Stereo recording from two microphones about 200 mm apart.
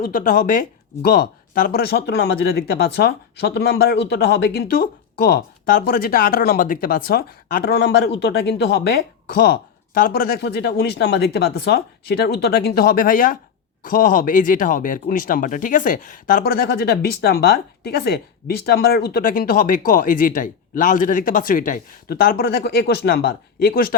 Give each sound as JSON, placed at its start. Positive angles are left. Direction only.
{"t": 0.0, "sound": "speech", "side_deg": 45}